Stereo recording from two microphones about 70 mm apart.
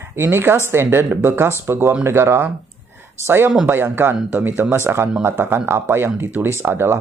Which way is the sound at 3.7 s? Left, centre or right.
Right.